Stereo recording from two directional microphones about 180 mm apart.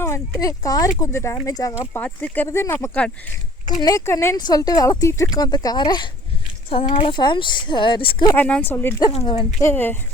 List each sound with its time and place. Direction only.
0.0 s speech: 20° left (ahead or behind)
8.3 s speech: 10° left (ahead or behind)
9.0 s speech: 30° left (ahead or behind)
9.6 s speech: 10° left (ahead or behind)